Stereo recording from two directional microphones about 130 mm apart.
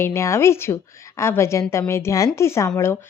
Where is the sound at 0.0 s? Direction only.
20° left (ahead or behind).